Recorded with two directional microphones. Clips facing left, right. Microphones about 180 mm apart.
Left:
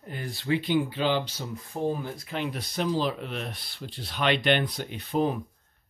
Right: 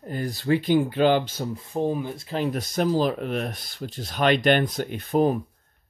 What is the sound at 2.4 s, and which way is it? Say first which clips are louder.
Speech: right 6 dB; 45° right (ahead or behind).